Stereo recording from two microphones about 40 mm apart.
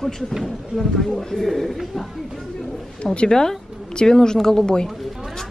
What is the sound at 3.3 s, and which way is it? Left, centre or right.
A woman's voice, centre.